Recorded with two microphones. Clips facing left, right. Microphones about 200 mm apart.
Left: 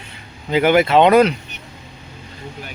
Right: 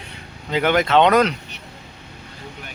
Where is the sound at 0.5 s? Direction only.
5° left (ahead or behind).